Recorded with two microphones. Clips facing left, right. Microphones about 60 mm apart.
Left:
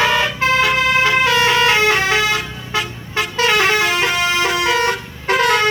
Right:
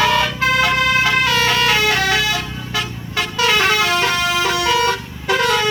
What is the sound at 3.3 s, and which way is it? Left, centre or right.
Vehicle, left.